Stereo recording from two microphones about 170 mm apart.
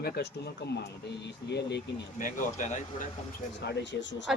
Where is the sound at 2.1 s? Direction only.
50° left (ahead or behind).